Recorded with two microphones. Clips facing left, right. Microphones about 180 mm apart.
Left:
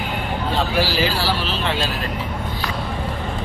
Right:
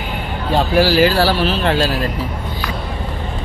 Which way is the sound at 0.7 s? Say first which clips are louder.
Right 11 dB; 45° right (ahead or behind).